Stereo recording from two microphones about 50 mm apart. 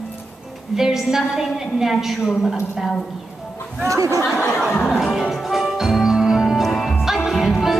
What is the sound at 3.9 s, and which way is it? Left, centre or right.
Speech, right.